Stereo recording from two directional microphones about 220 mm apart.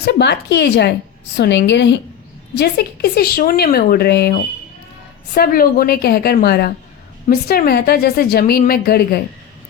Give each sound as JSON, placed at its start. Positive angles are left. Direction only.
{"t": 0.0, "sound": "a woman's voice", "side_deg": 50}